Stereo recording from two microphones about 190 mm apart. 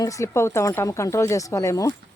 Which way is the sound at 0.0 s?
15° left (ahead or behind).